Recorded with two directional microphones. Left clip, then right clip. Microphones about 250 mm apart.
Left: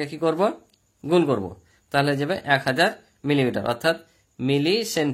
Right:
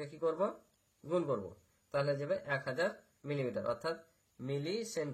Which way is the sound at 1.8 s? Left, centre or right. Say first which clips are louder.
Left 12 dB; left.